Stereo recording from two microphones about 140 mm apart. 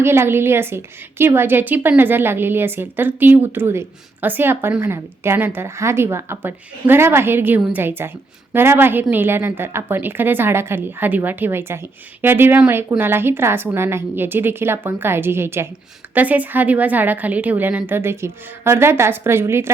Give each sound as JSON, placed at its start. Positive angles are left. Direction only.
{"t": 0.0, "sound": "a woman's voice", "side_deg": -15}